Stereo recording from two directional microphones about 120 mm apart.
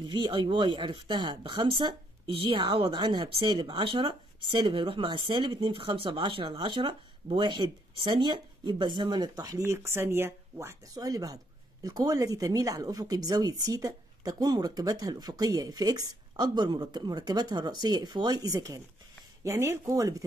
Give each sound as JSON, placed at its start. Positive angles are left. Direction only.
{"t": 0.0, "sound": "speech", "side_deg": -40}